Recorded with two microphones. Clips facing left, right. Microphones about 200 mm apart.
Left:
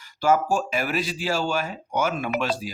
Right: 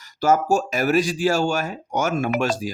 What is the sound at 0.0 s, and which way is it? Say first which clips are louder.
Speech: right 2 dB; 45° right (ahead or behind).